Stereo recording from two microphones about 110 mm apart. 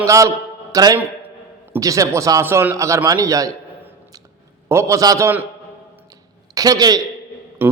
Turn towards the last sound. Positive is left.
turn(degrees=-20)  # may be behind; listen again after turning